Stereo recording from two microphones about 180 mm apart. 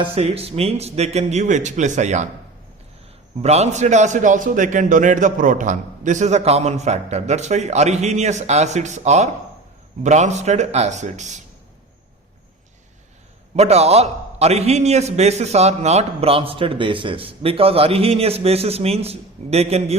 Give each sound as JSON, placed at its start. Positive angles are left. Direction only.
{"t": 0.0, "sound": "a man's voice", "side_deg": -30}
{"t": 3.4, "sound": "a man's voice", "side_deg": -35}
{"t": 13.6, "sound": "a man's voice", "side_deg": -35}